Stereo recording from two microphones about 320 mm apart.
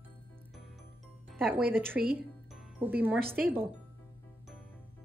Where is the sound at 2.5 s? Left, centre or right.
Centre.